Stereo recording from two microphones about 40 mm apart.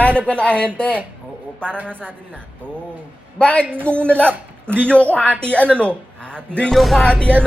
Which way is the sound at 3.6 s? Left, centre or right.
Right.